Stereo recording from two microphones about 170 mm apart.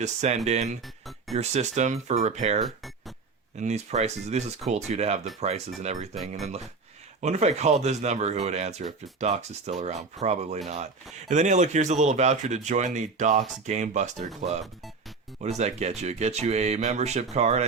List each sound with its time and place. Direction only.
0.0 s speech: 40° right (ahead or behind)
6.1 s speech: centre (ahead or behind)
7.2 s speech: 40° right (ahead or behind)
15.4 s speech: 40° right (ahead or behind)